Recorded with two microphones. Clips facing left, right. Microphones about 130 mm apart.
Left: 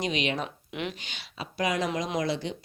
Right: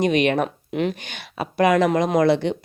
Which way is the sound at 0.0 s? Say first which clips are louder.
Right 10 dB; 55° right (ahead or behind).